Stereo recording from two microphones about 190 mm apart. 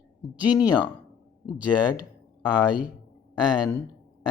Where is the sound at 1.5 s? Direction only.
5° right (ahead or behind).